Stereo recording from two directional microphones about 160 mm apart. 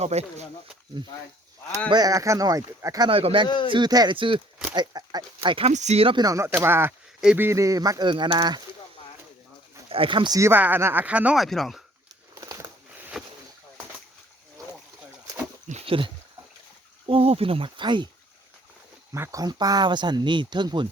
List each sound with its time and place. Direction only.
0.0 s speech: 40° right (ahead or behind)
1.9 s speech: 25° right (ahead or behind)
3.1 s speech: 35° right (ahead or behind)
5.7 s speech: 45° right (ahead or behind); by 8.6 s 25° right (ahead or behind)
9.9 s speech: 35° right (ahead or behind); by 11.8 s centre (ahead or behind)
12.3 s a sound: 20° right (ahead or behind)
13.0 s a sound: 5° right (ahead or behind)
15.9 s speech: 30° right (ahead or behind)
19.1 s speech: 20° right (ahead or behind)